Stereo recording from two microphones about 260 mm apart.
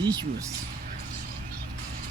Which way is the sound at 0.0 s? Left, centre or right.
Centre.